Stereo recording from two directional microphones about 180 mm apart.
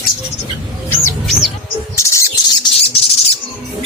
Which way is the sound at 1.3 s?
Centre (ahead or behind).